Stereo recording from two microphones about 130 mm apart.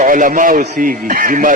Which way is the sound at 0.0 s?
90° right.